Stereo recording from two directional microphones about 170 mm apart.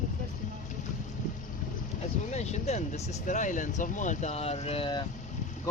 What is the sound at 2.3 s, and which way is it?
Speech, 40° left (ahead or behind).